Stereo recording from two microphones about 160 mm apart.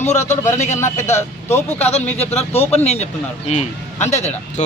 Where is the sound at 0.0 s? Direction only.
45° left (ahead or behind).